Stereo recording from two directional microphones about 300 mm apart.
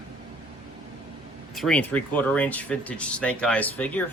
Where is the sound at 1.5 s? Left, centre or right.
Centre.